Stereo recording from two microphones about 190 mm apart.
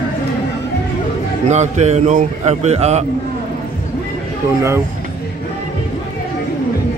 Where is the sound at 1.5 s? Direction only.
35° right (ahead or behind).